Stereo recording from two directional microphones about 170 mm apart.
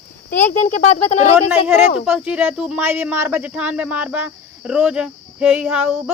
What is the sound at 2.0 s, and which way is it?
Speech, 5° right (ahead or behind).